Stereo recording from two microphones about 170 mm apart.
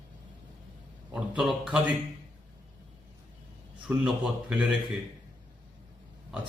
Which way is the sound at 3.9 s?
10° right (ahead or behind).